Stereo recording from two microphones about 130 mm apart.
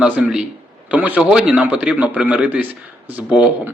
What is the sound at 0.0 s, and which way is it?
A man's voice, 5° right (ahead or behind).